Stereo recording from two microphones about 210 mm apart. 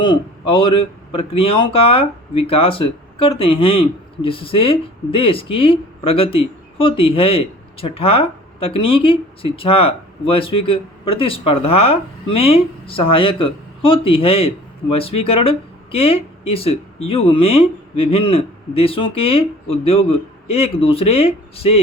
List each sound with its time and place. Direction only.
0.0 s speech: 25° left (ahead or behind)